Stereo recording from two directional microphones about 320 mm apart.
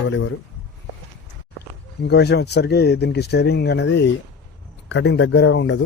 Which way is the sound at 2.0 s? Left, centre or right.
Left.